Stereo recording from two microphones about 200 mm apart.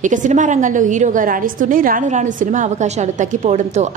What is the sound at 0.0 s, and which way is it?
A woman's voice, 40° right (ahead or behind).